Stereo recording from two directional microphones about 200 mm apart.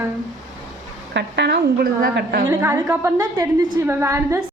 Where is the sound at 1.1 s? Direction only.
60° right (ahead or behind).